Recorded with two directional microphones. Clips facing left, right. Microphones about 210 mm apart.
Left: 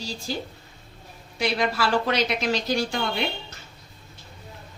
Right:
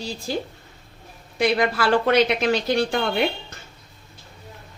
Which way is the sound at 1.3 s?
55° right (ahead or behind).